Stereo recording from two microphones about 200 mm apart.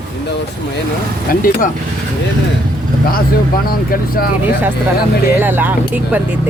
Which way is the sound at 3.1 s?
45° left (ahead or behind).